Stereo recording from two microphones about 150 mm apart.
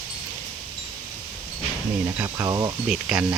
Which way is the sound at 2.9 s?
5° right (ahead or behind).